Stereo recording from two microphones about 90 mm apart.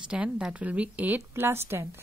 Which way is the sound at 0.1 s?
10° right (ahead or behind).